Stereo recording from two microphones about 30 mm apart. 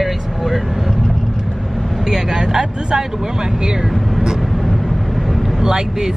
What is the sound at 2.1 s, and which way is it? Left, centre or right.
Speech, right.